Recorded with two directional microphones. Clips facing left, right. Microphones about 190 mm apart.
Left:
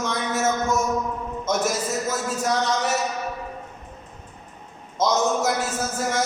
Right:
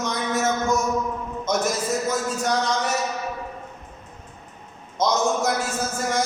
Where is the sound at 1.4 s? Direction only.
5° left (ahead or behind).